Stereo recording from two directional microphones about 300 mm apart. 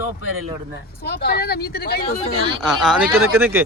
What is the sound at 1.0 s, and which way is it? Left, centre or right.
Speech, left.